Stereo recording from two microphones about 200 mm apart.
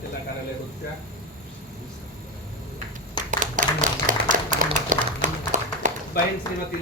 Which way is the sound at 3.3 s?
40° right (ahead or behind).